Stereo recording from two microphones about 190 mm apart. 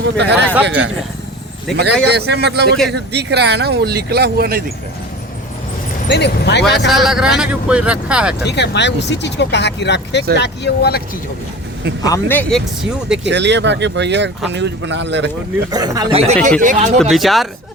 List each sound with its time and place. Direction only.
0.0 s speech: 65° right (ahead or behind)
1.7 s speech: 60° right (ahead or behind)
6.1 s speech: 65° left (ahead or behind)
6.8 s speech: centre (ahead or behind)
8.4 s speech: 65° left (ahead or behind)
12.0 s speech: 15° left (ahead or behind)
13.2 s speech: 65° right (ahead or behind)
15.7 s speech: 20° right (ahead or behind)
16.1 s speech: 35° right (ahead or behind)
17.0 s speech: centre (ahead or behind)